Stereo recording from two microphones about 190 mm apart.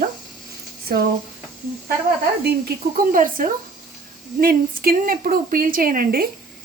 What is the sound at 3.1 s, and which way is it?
Speech, 45° right (ahead or behind).